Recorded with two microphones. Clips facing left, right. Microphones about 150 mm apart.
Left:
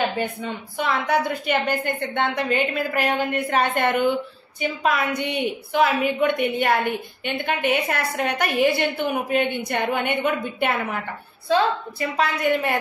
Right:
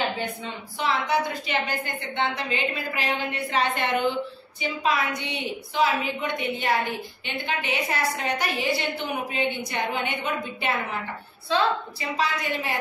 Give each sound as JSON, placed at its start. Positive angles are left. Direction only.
{"t": 0.2, "sound": "a woman's voice", "side_deg": 50}